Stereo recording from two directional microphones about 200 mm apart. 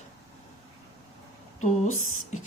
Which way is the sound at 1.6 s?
35° left (ahead or behind).